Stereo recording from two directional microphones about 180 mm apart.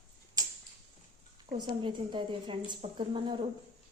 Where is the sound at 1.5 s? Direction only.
25° right (ahead or behind).